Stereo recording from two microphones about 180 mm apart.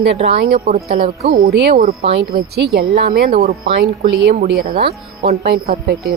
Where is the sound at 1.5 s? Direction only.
65° right (ahead or behind).